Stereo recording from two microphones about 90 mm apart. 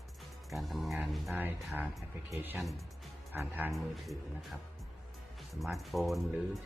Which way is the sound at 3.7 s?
Centre (ahead or behind).